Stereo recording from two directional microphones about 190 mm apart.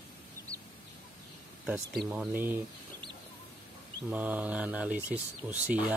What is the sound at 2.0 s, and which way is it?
Speech, 5° right (ahead or behind).